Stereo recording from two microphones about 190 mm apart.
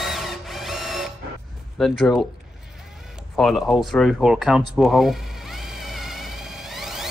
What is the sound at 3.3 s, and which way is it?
Speech, 5° left (ahead or behind).